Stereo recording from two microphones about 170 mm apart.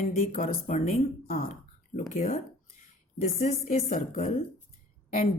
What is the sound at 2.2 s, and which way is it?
Speech, 45° left (ahead or behind).